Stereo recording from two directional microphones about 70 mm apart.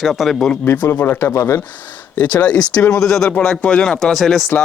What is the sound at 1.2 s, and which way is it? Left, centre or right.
Speech, left.